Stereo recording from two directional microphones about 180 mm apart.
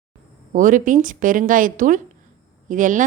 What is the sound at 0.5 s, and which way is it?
A woman's voice, 45° right (ahead or behind).